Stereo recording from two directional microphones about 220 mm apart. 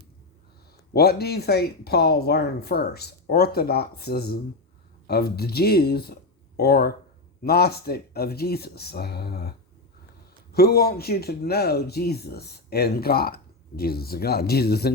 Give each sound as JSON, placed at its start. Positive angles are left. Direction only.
{"t": 0.9, "sound": "speech", "side_deg": 45}
{"t": 10.5, "sound": "speech", "side_deg": 45}